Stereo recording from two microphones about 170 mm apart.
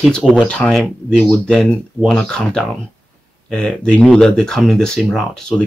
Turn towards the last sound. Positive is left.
turn(degrees=5)  # may be behind; listen again after turning